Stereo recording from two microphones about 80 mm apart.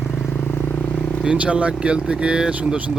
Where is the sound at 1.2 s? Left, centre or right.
Centre.